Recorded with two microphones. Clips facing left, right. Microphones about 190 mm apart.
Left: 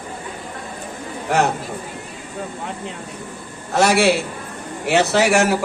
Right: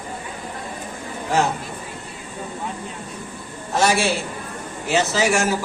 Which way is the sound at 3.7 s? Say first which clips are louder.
Left 4 dB; 65° left (ahead or behind).